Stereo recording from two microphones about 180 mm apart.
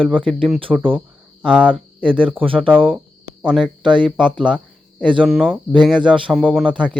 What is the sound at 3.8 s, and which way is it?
Speech, 25° right (ahead or behind).